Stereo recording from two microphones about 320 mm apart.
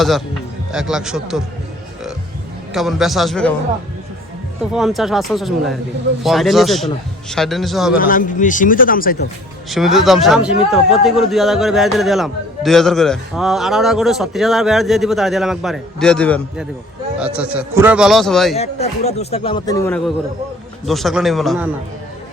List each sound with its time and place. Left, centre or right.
0.7 s a man's voice: centre
2.7 s a man's voice: centre
4.7 s a man's voice: centre
7.9 s speech: left
9.6 s a man's voice: centre
18.5 s a man's voice: centre